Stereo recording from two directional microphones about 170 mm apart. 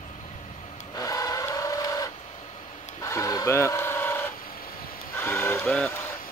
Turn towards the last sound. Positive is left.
turn(degrees=10)  # may be behind; listen again after turning